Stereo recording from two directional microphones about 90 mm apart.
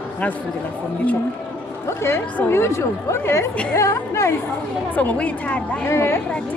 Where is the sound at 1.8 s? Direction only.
30° left (ahead or behind).